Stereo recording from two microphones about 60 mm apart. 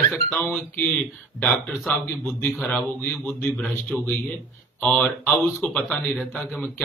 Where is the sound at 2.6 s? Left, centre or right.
Centre.